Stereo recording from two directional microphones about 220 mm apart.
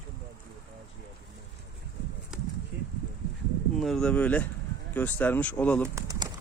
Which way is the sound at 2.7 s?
50° right (ahead or behind).